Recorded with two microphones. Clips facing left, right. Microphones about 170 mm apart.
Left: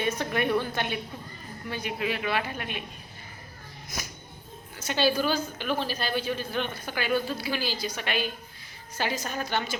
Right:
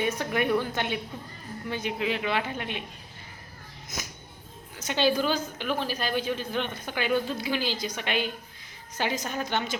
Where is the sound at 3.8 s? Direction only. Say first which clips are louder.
Even; 20° right (ahead or behind).